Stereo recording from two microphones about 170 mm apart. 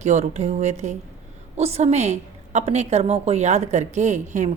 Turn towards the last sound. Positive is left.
turn(degrees=-45)  # may be behind; listen again after turning